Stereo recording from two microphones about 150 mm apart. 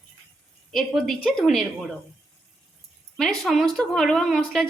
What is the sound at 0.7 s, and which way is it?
Speech, centre (ahead or behind).